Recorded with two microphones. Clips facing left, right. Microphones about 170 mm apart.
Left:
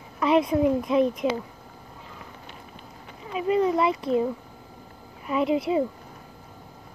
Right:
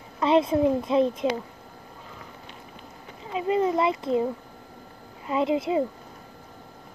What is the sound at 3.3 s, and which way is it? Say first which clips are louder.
Speech: left 1 dB; 25° right (ahead or behind).